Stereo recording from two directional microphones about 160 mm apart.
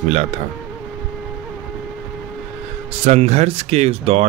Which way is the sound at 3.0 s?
40° right (ahead or behind).